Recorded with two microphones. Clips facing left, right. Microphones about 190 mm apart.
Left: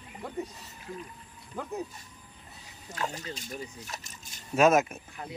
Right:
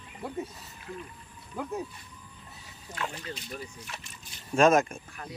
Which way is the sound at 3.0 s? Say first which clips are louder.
Left 1 dB; 40° left (ahead or behind).